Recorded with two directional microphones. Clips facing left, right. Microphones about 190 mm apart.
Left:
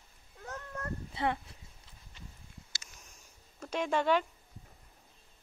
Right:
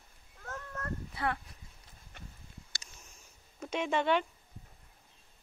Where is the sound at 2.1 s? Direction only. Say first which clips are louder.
Right 2 dB; 60° right (ahead or behind).